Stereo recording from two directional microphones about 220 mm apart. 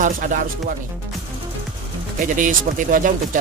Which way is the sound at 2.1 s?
35° right (ahead or behind).